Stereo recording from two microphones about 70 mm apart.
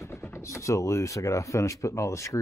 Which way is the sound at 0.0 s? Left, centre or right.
Left.